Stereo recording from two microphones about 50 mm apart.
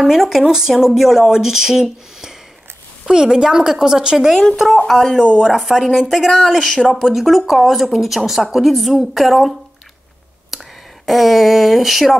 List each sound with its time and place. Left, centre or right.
0.0 s speech: centre
4.8 s speech: centre
5.2 s speech: right
5.5 s speech: centre
7.0 s speech: centre
10.5 s a sound: centre
11.1 s speech: centre